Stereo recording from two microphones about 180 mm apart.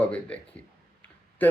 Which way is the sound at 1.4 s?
10° left (ahead or behind).